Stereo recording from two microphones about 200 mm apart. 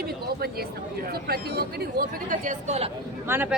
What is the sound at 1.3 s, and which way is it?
Speech, 50° right (ahead or behind).